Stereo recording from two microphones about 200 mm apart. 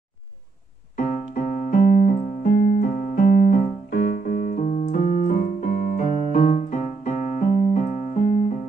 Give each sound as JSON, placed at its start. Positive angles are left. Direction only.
{"t": 0.9, "sound": "keyboard", "side_deg": 40}